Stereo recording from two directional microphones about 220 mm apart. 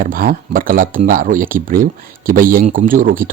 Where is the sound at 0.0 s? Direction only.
40° right (ahead or behind).